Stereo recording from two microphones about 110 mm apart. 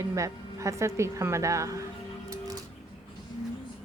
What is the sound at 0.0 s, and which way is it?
A woman's voice, 30° right (ahead or behind).